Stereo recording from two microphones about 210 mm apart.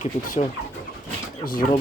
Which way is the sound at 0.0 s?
35° left (ahead or behind).